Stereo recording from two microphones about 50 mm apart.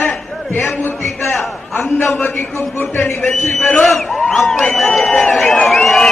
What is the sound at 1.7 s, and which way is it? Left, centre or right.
A man's voice, left.